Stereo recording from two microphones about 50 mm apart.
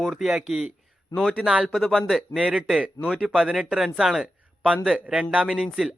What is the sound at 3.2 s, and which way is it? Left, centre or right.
Speech, centre.